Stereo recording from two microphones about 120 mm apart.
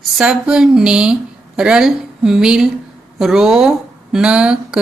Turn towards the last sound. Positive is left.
turn(degrees=-10)  # may be behind; listen again after turning